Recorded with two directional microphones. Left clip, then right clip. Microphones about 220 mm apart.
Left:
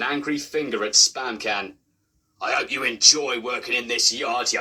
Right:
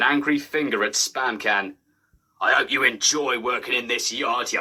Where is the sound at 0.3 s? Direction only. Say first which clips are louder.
Right 3 dB; 50° right (ahead or behind).